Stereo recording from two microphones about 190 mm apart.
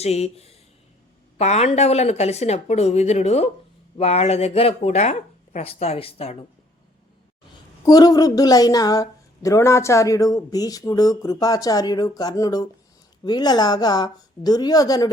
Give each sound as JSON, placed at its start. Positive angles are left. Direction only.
{"t": 0.0, "sound": "speech", "side_deg": 35}
{"t": 7.9, "sound": "speech", "side_deg": 20}